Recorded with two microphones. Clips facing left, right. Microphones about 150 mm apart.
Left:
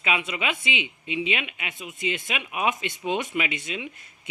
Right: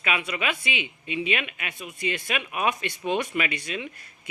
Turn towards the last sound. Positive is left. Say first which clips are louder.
# even
turn(degrees=20)  # may be behind; listen again after turning